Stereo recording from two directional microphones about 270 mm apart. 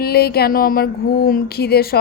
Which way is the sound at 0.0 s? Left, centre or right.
Left.